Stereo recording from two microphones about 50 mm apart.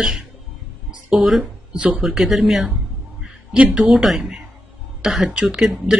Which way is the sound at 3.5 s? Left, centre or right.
Right.